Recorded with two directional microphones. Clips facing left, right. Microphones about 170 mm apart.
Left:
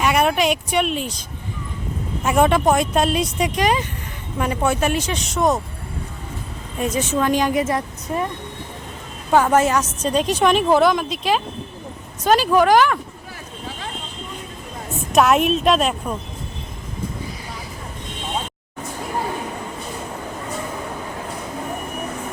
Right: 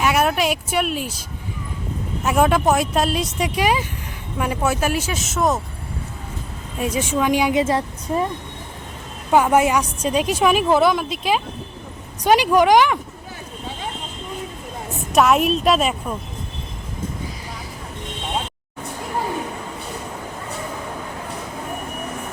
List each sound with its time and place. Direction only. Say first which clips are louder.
0.0 s speech: left 1 dB; centre (ahead or behind)
2.2 s speech: left 1 dB; centre (ahead or behind)
6.7 s a woman's voice: even; 10° right (ahead or behind)
7.5 s a woman's voice: right 2 dB; 25° right (ahead or behind)
9.3 s a woman's voice: even; 10° right (ahead or behind)
12.2 s a woman's voice: right 1 dB; 15° right (ahead or behind)
15.1 s speech: even; centre (ahead or behind)